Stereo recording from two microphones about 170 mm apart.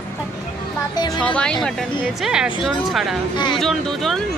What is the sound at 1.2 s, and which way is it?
Speech, 5° left (ahead or behind).